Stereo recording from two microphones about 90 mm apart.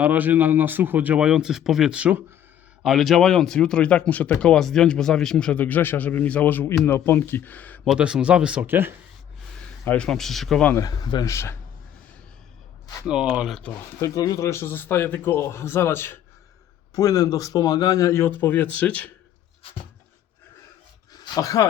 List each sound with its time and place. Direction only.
0.0 s speech: 20° right (ahead or behind)
2.8 s speech: centre (ahead or behind); by 7.8 s 20° left (ahead or behind)
7.9 s speech: 10° right (ahead or behind)
8.6 s speech: 25° right (ahead or behind)
9.8 s speech: 15° left (ahead or behind)
10.1 s speech: 5° left (ahead or behind)
10.8 s speech: 50° left (ahead or behind)
11.3 s a man's voice: 30° left (ahead or behind)
13.1 s speech: 10° right (ahead or behind)
14.0 s speech: 40° left (ahead or behind)
16.9 s a man's voice: 40° left (ahead or behind); by 19.1 s 15° left (ahead or behind)
21.1 s a sound: 50° left (ahead or behind)